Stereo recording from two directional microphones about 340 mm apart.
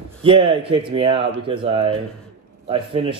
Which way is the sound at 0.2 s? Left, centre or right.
Centre.